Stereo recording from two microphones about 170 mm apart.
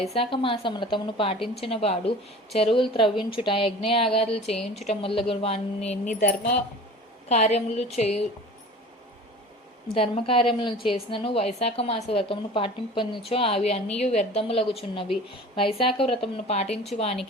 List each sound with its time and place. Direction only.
0.0 s a woman's voice: 35° left (ahead or behind)
9.9 s a woman's voice: 35° left (ahead or behind)